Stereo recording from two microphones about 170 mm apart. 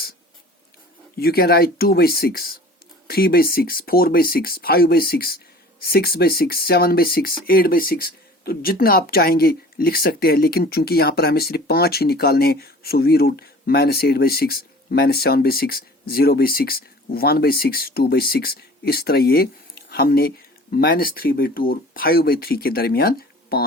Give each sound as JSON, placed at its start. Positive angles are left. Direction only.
{"t": 1.1, "sound": "speech", "side_deg": 65}